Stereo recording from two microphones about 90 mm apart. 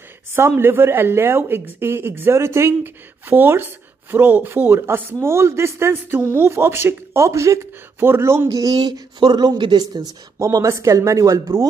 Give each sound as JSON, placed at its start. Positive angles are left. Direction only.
{"t": 0.3, "sound": "speech", "side_deg": -25}
{"t": 10.4, "sound": "speech", "side_deg": -35}